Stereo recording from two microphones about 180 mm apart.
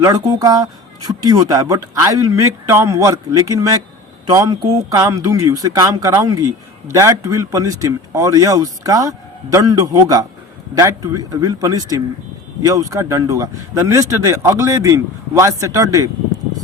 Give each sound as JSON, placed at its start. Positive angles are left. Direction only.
{"t": 0.0, "sound": "speech", "side_deg": -20}